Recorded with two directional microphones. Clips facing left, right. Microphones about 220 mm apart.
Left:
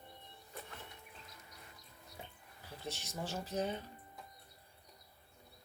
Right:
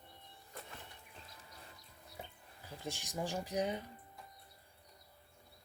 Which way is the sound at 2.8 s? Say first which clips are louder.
Right 3 dB; 15° right (ahead or behind).